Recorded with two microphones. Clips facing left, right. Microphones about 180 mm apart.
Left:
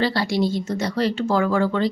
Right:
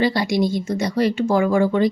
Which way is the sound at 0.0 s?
15° right (ahead or behind).